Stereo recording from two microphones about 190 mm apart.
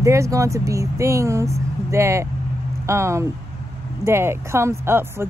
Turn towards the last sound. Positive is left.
turn(degrees=-10)  # may be behind; listen again after turning